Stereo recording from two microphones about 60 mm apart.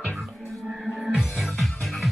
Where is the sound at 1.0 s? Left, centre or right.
Centre.